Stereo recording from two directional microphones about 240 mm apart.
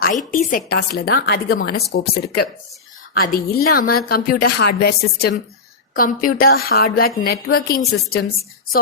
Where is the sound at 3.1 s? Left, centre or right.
Left.